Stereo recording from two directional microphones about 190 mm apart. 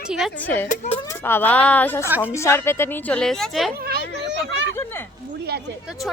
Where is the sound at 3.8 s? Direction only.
60° right (ahead or behind).